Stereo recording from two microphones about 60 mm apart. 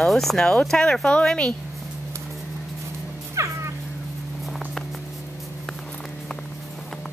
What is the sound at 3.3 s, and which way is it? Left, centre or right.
Cat, right.